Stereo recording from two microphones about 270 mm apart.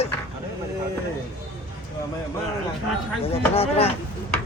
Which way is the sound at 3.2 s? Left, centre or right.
Left.